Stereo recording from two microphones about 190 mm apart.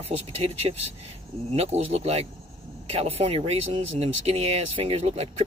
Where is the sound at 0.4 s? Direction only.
30° right (ahead or behind).